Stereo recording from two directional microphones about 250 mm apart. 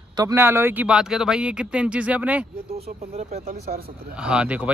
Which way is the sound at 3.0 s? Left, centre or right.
Right.